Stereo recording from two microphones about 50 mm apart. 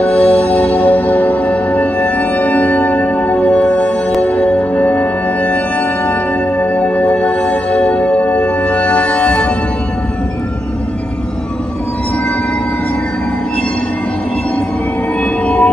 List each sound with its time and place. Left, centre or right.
0.0 s music: left
15.4 s train: left